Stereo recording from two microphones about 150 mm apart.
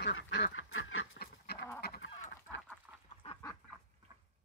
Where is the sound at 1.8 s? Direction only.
90° left.